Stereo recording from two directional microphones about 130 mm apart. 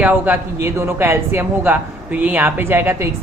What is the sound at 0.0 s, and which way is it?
Speech, 15° right (ahead or behind).